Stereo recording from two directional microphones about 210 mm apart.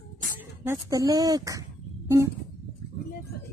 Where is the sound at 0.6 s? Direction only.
15° right (ahead or behind).